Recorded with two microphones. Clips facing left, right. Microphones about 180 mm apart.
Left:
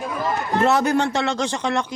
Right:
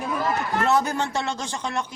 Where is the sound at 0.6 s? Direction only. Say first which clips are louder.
Left 5 dB; 75° left (ahead or behind).